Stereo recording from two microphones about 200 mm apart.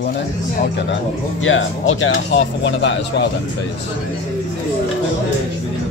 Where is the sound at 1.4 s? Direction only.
75° left (ahead or behind).